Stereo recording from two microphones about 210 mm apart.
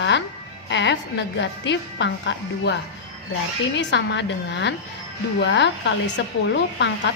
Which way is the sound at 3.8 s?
60° left (ahead or behind).